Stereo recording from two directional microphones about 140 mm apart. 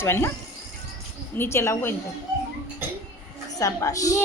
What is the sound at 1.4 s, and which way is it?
Speech, 20° left (ahead or behind).